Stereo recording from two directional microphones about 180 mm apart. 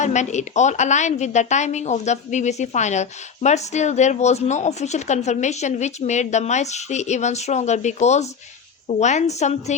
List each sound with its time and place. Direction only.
0.0 s a woman's voice: 40° left (ahead or behind)